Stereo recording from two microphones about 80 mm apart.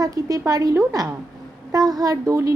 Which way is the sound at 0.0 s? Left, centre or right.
Right.